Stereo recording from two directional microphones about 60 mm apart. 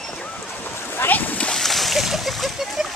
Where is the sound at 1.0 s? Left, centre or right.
Left.